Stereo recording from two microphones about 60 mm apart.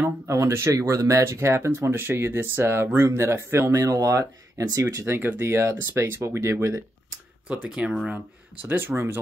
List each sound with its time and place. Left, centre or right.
0.3 s speech: right
3.8 s speech: right
5.0 s speech: right
7.4 s speech: right
8.6 s speech: right